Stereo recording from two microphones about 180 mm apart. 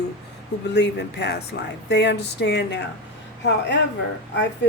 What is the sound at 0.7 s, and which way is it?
Speech, 70° left (ahead or behind).